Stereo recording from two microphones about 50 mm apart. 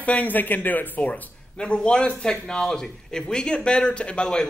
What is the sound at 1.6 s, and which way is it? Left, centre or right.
A man's voice, centre.